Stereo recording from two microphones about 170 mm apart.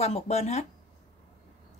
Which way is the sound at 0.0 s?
40° left (ahead or behind).